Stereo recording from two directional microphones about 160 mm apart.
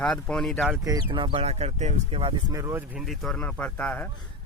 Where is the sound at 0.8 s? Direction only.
25° right (ahead or behind).